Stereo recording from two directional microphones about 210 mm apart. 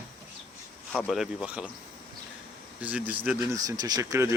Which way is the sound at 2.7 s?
5° right (ahead or behind).